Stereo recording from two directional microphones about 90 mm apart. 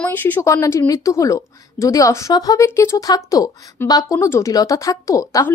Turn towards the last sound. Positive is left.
turn(degrees=35)  # may be behind; listen again after turning